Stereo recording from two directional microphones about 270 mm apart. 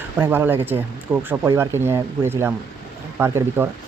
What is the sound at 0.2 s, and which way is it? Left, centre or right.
Speech, centre.